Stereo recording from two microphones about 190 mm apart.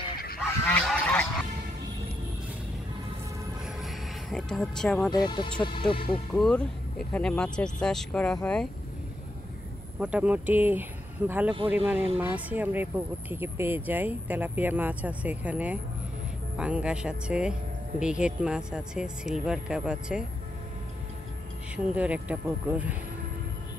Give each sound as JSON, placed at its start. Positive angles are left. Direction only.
{"t": 0.4, "sound": "goose", "side_deg": 5}
{"t": 3.6, "sound": "a sound", "side_deg": 0}
{"t": 5.1, "sound": "speech", "side_deg": 25}
{"t": 6.3, "sound": "speech", "side_deg": 5}
{"t": 9.9, "sound": "speech", "side_deg": -5}
{"t": 21.7, "sound": "speech", "side_deg": -5}